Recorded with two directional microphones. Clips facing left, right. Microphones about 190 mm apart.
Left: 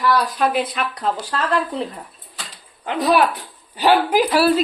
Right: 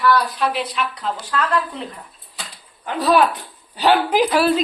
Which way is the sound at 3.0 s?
15° left (ahead or behind).